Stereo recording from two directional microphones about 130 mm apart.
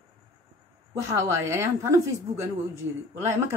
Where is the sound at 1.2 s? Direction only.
20° right (ahead or behind).